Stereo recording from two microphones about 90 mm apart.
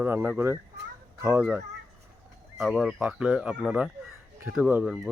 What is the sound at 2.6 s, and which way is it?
Speech, 5° right (ahead or behind).